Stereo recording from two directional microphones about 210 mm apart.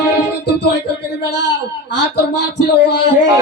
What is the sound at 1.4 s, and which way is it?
Speech, 55° left (ahead or behind).